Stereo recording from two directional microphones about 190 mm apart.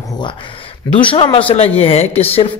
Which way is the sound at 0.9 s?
25° left (ahead or behind).